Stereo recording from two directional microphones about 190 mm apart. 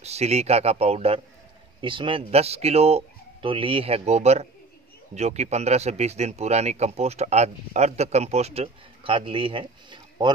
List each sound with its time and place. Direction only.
0.0 s speech: 35° right (ahead or behind)